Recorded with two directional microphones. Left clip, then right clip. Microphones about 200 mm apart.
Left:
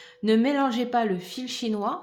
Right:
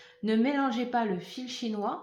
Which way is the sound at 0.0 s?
45° left (ahead or behind).